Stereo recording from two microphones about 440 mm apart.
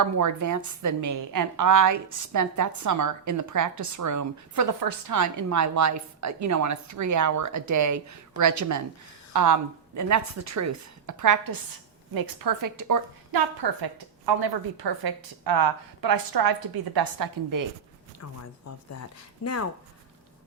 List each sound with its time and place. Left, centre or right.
0.0 s a woman's voice: right
19.4 s speech: left